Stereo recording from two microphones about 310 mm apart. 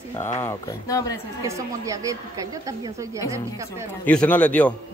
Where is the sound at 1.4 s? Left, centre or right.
Centre.